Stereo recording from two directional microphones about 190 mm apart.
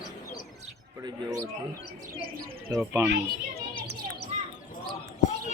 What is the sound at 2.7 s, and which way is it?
Speech, 15° right (ahead or behind).